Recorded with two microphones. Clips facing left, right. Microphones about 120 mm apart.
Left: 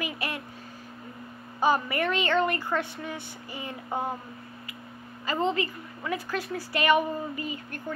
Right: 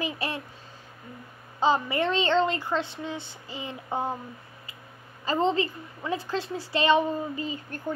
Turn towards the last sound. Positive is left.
turn(degrees=-30)  # may be behind; listen again after turning